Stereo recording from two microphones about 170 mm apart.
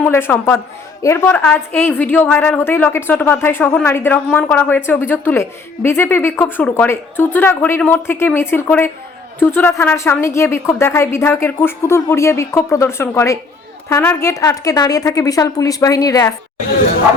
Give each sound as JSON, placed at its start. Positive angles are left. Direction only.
{"t": 0.0, "sound": "a woman's voice", "side_deg": 10}